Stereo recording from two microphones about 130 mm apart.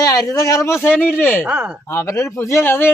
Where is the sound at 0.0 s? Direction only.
30° left (ahead or behind).